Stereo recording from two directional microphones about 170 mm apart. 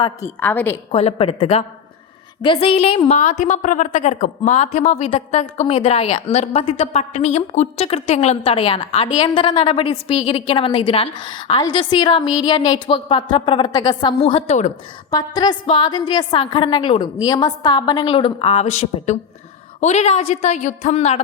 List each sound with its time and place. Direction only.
0.3 s a woman's voice: 10° left (ahead or behind)
0.9 s a woman's voice: 35° left (ahead or behind)
3.2 s a woman's voice: 45° left (ahead or behind); by 14.2 s 25° left (ahead or behind)
14.2 s a woman's voice: 40° left (ahead or behind)
15.1 s a woman's voice: 25° left (ahead or behind); by 21.2 s 40° left (ahead or behind)